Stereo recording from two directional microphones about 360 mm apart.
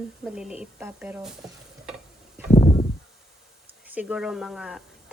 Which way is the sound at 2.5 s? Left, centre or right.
Centre.